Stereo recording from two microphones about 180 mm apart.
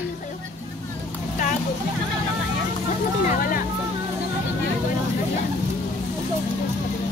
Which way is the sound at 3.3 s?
50° left (ahead or behind).